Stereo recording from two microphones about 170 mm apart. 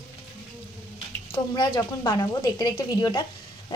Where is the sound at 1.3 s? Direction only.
25° left (ahead or behind).